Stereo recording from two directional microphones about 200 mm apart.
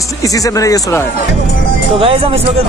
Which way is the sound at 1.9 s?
30° right (ahead or behind).